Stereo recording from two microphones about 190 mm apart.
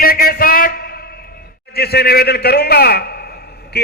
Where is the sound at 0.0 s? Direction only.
50° left (ahead or behind).